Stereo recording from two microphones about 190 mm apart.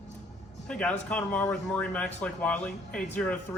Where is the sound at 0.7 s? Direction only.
5° left (ahead or behind).